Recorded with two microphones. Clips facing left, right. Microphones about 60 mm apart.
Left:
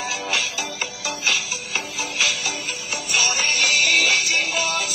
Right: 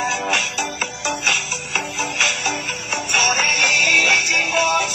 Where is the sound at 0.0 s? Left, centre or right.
Right.